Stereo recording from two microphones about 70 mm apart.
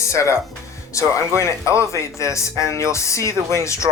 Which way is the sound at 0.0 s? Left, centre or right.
Left.